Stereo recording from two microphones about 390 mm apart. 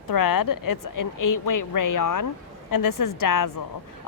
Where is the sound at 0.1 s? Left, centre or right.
Left.